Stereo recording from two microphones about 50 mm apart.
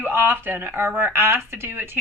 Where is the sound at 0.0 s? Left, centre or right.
Right.